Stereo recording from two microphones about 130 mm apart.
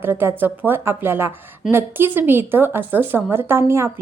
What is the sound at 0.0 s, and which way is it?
A woman's voice, 15° right (ahead or behind).